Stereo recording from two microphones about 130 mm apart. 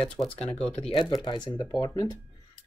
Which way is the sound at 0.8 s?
40° left (ahead or behind).